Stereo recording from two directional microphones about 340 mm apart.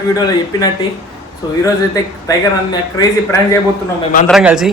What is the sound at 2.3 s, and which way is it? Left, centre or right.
Speech, centre.